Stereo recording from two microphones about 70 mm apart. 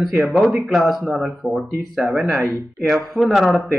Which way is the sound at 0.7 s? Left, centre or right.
Centre.